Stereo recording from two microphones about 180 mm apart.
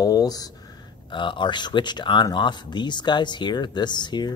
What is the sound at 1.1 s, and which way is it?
Speech, 25° left (ahead or behind).